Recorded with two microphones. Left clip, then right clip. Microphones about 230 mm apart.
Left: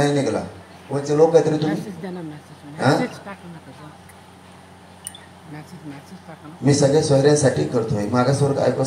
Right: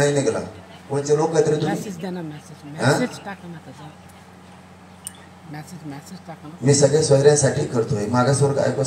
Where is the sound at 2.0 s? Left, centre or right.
Right.